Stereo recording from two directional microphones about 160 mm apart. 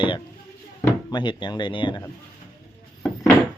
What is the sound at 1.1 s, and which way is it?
Speech, 30° left (ahead or behind).